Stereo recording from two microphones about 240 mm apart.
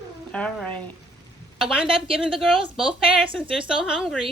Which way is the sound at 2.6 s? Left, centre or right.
Right.